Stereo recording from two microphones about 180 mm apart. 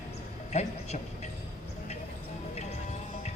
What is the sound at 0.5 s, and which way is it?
Speech, 40° left (ahead or behind).